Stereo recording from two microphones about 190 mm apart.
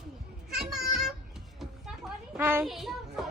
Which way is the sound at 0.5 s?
Centre (ahead or behind).